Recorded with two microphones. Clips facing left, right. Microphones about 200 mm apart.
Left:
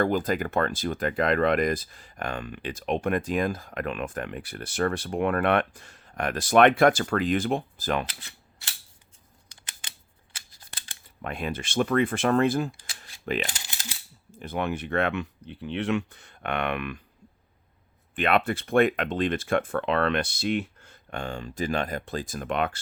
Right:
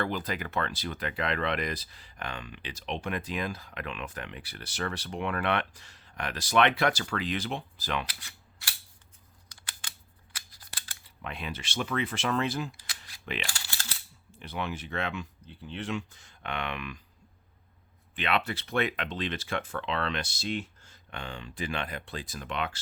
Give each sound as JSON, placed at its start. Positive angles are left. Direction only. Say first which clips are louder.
{"t": 0.0, "sound": "speech", "louder": "left 8 dB", "side_deg": 45}
{"t": 8.0, "sound": "speech", "louder": "left 4 dB", "side_deg": 25}
{"t": 9.5, "sound": "computer keyboard", "louder": "even", "side_deg": 25}
{"t": 10.3, "sound": "scissors", "louder": "even", "side_deg": 25}
{"t": 11.0, "sound": "speech", "louder": "left 7 dB", "side_deg": 50}
{"t": 13.5, "sound": "coin", "louder": "left 2 dB", "side_deg": 15}
{"t": 14.3, "sound": "speech", "louder": "left 6 dB", "side_deg": 45}
{"t": 18.1, "sound": "speech", "louder": "left 6 dB", "side_deg": 50}